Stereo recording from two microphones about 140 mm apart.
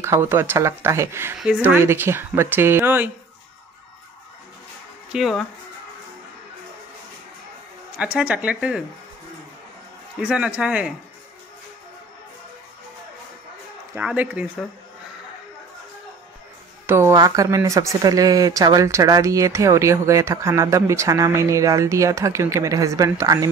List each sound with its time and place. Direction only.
0.0 s speech: 20° right (ahead or behind)
5.1 s speech: centre (ahead or behind)
8.0 s speech: 10° right (ahead or behind)
10.1 s speech: 10° right (ahead or behind)
13.9 s speech: 15° right (ahead or behind)
16.8 s speech: 20° right (ahead or behind)